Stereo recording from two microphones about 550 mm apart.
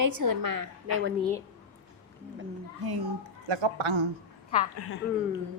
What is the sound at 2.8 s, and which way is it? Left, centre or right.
Speech, right.